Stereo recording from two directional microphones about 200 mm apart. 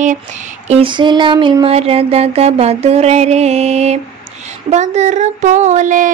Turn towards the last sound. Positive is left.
turn(degrees=-40)  # may be behind; listen again after turning